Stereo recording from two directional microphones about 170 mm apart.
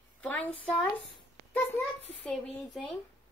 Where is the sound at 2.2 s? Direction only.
5° left (ahead or behind).